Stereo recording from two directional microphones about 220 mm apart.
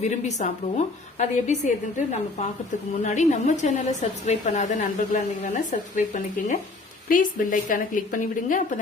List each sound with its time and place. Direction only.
0.1 s a woman's voice: 30° left (ahead or behind)